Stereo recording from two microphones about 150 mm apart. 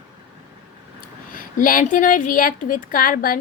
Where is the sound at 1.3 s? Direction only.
65° left (ahead or behind).